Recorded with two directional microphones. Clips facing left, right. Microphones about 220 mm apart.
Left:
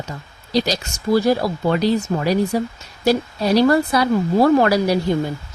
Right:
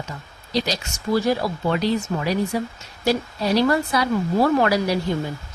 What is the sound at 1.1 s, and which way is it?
Speech, 40° left (ahead or behind).